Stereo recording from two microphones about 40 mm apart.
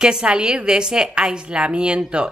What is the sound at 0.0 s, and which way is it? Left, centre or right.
Speech, right.